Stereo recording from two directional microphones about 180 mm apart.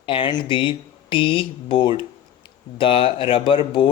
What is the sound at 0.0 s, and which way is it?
Speech, 25° left (ahead or behind).